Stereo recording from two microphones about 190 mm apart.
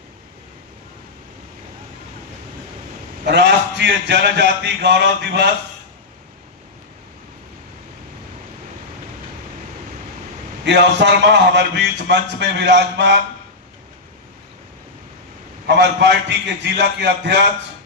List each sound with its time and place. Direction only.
3.2 s a man's voice: 65° right (ahead or behind)
10.7 s a man's voice: 65° right (ahead or behind)
15.6 s a man's voice: 65° right (ahead or behind)